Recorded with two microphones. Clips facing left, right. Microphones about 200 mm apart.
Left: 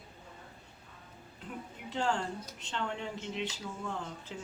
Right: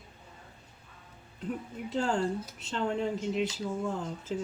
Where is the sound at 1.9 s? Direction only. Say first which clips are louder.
Right 4 dB; 35° right (ahead or behind).